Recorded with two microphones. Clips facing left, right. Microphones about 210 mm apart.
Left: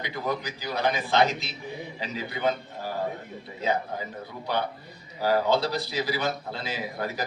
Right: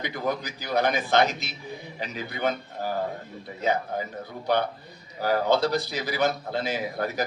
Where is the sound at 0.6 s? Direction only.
45° right (ahead or behind).